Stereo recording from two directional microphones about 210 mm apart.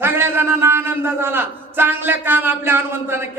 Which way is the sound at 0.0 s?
10° right (ahead or behind).